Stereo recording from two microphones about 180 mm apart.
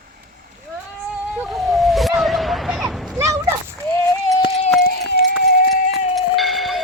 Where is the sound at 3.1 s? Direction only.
15° right (ahead or behind).